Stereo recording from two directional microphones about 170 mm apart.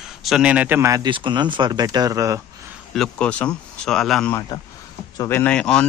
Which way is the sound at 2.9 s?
5° left (ahead or behind).